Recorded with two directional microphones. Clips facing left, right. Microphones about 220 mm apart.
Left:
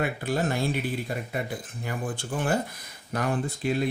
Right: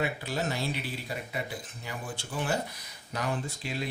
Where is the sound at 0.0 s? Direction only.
55° left (ahead or behind).